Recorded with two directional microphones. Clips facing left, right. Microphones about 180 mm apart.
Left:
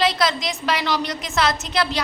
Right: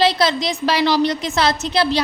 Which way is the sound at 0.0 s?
30° right (ahead or behind).